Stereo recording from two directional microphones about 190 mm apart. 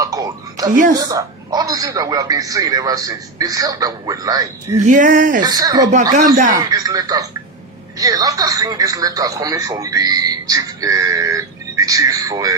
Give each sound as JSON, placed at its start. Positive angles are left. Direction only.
{"t": 0.0, "sound": "a man's voice", "side_deg": -20}
{"t": 4.9, "sound": "speech", "side_deg": -45}
{"t": 5.4, "sound": "a man's voice", "side_deg": -20}
{"t": 5.9, "sound": "speech", "side_deg": -40}
{"t": 6.6, "sound": "a man's voice", "side_deg": -20}